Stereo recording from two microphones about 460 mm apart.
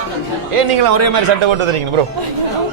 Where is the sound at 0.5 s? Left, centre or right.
Right.